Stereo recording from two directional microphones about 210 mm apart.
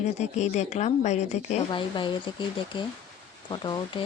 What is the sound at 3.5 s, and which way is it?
Speech, 20° left (ahead or behind).